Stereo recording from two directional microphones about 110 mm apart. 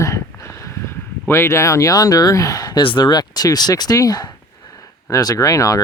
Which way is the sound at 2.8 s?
45° left (ahead or behind).